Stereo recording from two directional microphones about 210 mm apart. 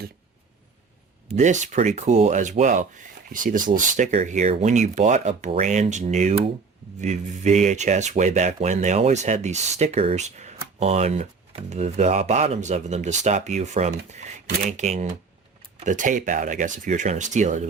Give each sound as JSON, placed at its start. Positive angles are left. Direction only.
{"t": 1.4, "sound": "speech", "side_deg": -35}